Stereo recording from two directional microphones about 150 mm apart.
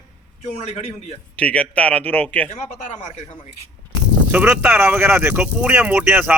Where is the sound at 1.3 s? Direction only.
10° left (ahead or behind).